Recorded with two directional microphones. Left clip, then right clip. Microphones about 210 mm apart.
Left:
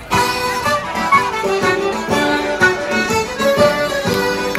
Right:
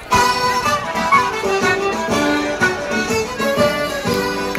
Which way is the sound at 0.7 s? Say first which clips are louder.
Left 1 dB; 25° left (ahead or behind).